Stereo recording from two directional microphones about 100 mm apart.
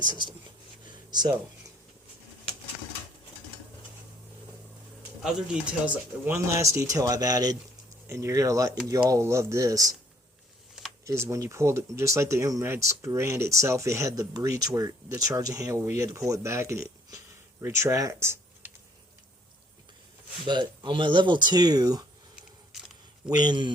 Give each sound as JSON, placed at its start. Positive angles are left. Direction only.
{"t": 0.1, "sound": "speech", "side_deg": -50}
{"t": 5.2, "sound": "speech", "side_deg": -10}
{"t": 6.3, "sound": "speech", "side_deg": -30}
{"t": 8.0, "sound": "speech", "side_deg": -30}
{"t": 11.0, "sound": "speech", "side_deg": -30}
{"t": 20.4, "sound": "speech", "side_deg": -50}
{"t": 23.3, "sound": "speech", "side_deg": -45}